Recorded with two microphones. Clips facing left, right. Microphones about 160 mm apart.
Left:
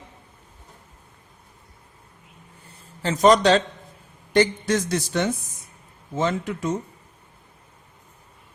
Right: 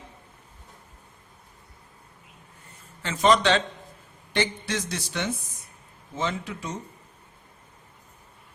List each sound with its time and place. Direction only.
3.0 s a man's voice: 40° left (ahead or behind)